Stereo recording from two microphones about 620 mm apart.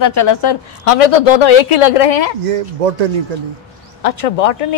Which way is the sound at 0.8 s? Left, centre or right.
Left.